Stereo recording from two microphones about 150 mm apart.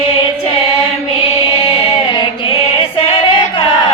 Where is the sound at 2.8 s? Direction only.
40° left (ahead or behind).